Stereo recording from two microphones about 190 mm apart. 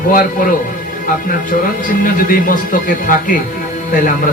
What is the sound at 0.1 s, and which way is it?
Speech, 45° left (ahead or behind).